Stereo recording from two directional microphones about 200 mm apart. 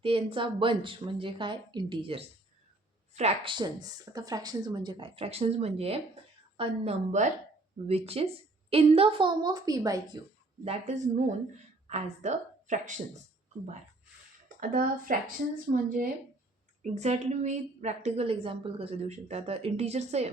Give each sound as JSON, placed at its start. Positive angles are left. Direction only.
{"t": 0.0, "sound": "a woman's voice", "side_deg": -25}
{"t": 10.6, "sound": "a woman's voice", "side_deg": -35}
{"t": 14.6, "sound": "speech", "side_deg": -45}
{"t": 16.8, "sound": "a woman's voice", "side_deg": -35}